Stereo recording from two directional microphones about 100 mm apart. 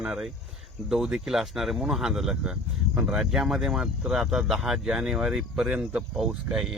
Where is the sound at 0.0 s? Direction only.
5° right (ahead or behind).